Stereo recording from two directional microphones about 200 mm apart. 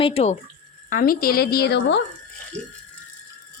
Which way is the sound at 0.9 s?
45° left (ahead or behind).